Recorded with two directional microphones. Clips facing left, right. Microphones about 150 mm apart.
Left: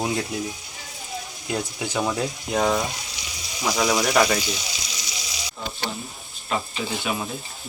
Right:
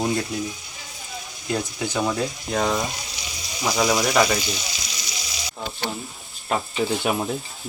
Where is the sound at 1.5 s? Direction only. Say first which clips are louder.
Right 1 dB; 10° left (ahead or behind).